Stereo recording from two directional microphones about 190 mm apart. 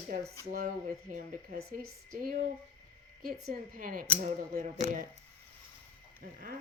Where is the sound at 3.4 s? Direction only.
50° right (ahead or behind).